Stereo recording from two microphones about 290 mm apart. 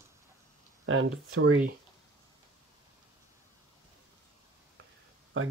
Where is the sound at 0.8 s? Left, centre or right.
Right.